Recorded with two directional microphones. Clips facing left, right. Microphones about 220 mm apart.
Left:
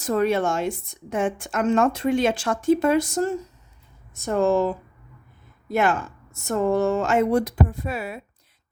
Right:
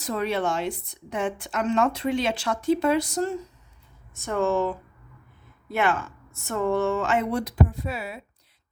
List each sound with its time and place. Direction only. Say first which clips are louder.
0.0 s a woman's voice: left 5 dB; 50° left (ahead or behind)
4.2 s a woman's voice: left 4 dB; 35° left (ahead or behind)